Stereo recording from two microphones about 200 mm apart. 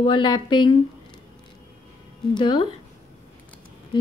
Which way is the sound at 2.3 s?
25° left (ahead or behind).